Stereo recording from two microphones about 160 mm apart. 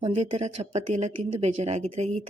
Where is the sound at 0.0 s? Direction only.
35° right (ahead or behind).